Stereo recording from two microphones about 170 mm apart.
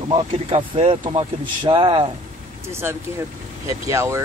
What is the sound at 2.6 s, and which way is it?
Speech, 15° right (ahead or behind).